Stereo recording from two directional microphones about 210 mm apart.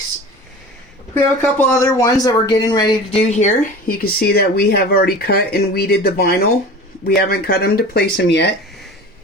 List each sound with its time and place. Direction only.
1.1 s speech: 10° left (ahead or behind); by 8.5 s 55° left (ahead or behind)